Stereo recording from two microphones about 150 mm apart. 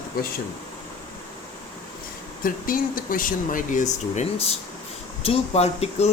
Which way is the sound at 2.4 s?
70° left (ahead or behind).